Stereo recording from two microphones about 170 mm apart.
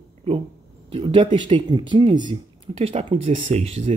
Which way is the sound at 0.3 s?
35° right (ahead or behind).